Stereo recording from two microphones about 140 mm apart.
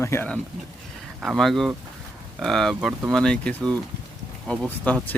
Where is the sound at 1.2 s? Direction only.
5° right (ahead or behind).